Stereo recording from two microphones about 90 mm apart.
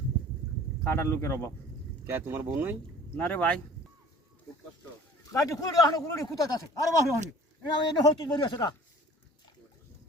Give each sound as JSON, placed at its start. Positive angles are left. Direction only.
{"t": 0.9, "sound": "speech", "side_deg": 30}
{"t": 2.0, "sound": "speech", "side_deg": -25}
{"t": 3.2, "sound": "speech", "side_deg": 20}
{"t": 5.2, "sound": "a man's voice", "side_deg": 40}